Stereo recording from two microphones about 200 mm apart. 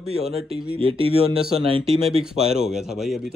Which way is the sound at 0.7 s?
25° right (ahead or behind).